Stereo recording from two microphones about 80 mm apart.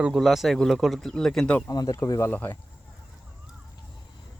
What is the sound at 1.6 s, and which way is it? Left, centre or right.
Speech, left.